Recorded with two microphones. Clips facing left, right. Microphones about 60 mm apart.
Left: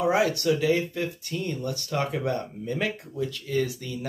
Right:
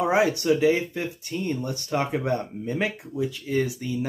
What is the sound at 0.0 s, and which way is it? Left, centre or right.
Speech, right.